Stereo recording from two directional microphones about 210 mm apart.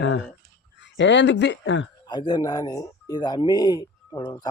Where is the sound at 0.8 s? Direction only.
60° left (ahead or behind).